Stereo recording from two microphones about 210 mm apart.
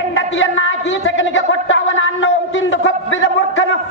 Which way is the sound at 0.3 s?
65° left (ahead or behind).